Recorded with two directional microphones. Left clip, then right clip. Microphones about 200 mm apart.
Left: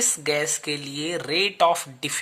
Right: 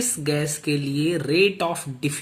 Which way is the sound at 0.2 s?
40° left (ahead or behind).